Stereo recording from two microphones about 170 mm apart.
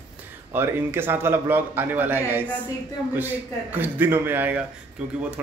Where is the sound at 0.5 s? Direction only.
15° right (ahead or behind).